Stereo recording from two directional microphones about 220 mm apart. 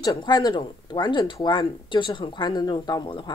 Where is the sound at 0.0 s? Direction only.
20° left (ahead or behind).